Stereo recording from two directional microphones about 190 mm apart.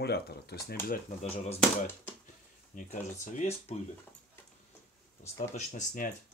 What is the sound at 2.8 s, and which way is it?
Speech, 40° left (ahead or behind).